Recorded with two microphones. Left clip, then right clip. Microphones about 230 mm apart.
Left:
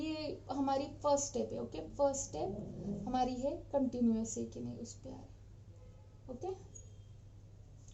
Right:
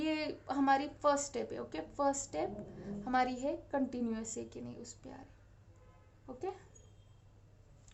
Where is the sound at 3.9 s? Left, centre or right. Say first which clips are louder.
Left 4 dB; right.